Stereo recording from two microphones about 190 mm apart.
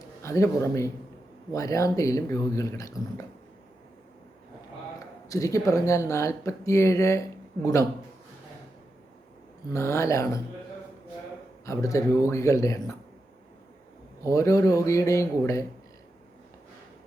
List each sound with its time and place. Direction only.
0.2 s speech: 15° left (ahead or behind)
5.3 s speech: 15° left (ahead or behind)
9.6 s speech: 15° left (ahead or behind)
11.6 s speech: 15° left (ahead or behind)
14.3 s speech: 15° left (ahead or behind)